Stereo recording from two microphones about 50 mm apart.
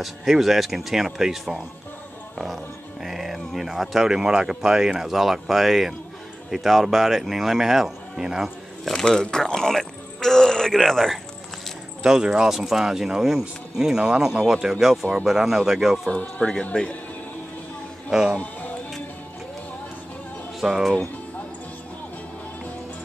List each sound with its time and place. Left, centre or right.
0.0 s speech: centre
2.3 s music: centre
3.0 s speech: centre
8.8 s speech: centre
12.0 s speech: centre
16.1 s speech: centre
20.6 s speech: centre